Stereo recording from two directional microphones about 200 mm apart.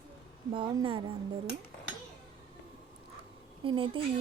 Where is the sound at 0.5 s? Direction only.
25° right (ahead or behind).